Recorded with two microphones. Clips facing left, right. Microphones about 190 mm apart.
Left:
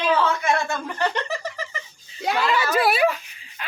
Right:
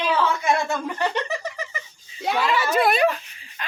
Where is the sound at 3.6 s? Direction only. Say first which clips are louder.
Right 1 dB; 10° left (ahead or behind).